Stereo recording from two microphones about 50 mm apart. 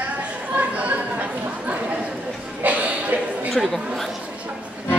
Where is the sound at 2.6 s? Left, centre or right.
Right.